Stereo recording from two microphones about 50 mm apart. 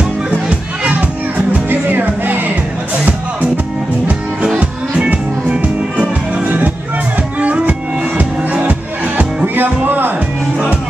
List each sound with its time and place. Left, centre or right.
0.0 s music: right
1.5 s music: right
4.6 s music: right